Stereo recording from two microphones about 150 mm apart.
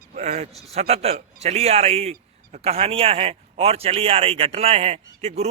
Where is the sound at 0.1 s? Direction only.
50° right (ahead or behind).